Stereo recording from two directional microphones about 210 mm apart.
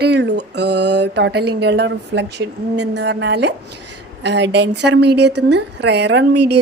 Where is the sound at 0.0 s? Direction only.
55° right (ahead or behind).